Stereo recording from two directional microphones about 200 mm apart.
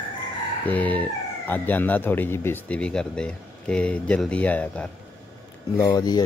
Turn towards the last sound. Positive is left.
turn(degrees=20)  # may be behind; listen again after turning